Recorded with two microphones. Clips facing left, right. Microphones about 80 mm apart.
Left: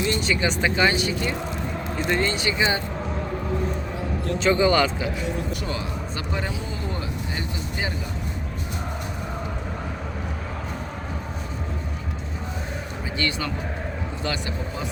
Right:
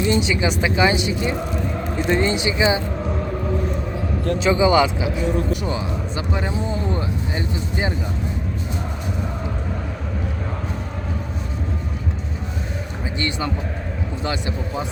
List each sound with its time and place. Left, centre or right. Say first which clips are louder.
0.0 s speech: right 4 dB; centre
4.4 s speech: right 3 dB; centre
6.5 s vehicle: right 7 dB; right
13.1 s speech: right 2 dB; right